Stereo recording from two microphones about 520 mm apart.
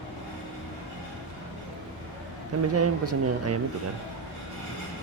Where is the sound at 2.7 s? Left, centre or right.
Right.